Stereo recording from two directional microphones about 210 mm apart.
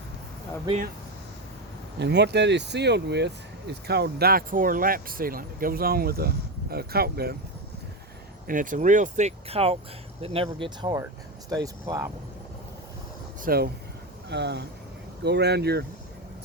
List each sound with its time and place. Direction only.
2.0 s speech: 50° right (ahead or behind)
8.4 s speech: 40° right (ahead or behind); by 12.1 s 15° right (ahead or behind)
13.4 s speech: 45° right (ahead or behind)